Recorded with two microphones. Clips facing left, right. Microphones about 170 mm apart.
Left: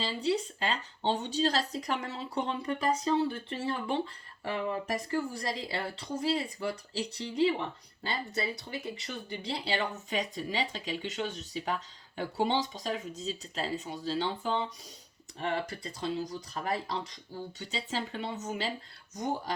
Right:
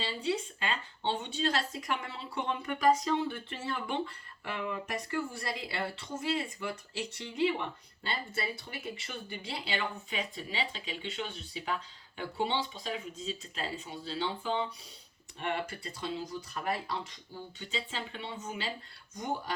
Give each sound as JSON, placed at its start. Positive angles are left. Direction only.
{"t": 0.0, "sound": "speech", "side_deg": 40}